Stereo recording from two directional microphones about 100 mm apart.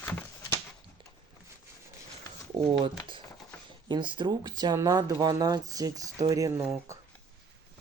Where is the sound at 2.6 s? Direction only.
55° right (ahead or behind); by 6.6 s 35° right (ahead or behind).